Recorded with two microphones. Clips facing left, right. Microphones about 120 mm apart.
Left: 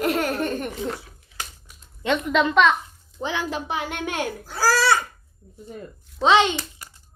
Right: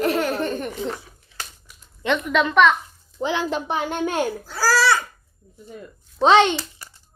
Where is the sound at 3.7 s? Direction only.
35° right (ahead or behind).